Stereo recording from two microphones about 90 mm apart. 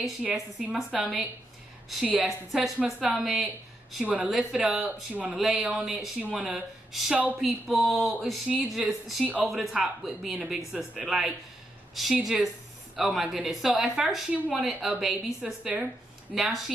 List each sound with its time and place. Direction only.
0.2 s a woman's voice: 10° right (ahead or behind)
2.2 s a woman's voice: centre (ahead or behind)
2.8 s a woman's voice: 15° right (ahead or behind)
3.2 s a woman's voice: 5° right (ahead or behind)
4.0 s a woman's voice: 15° right (ahead or behind)
5.3 s a woman's voice: 5° right (ahead or behind)
9.2 s a woman's voice: 15° right (ahead or behind)
9.5 s a woman's voice: centre (ahead or behind)